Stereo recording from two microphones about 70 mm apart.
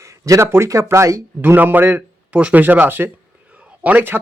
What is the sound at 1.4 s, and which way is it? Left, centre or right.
A man's voice, right.